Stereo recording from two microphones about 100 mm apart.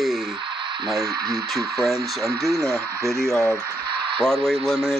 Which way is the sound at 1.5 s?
Centre (ahead or behind).